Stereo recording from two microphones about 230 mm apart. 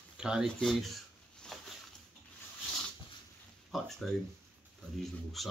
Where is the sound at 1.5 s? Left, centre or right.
Centre.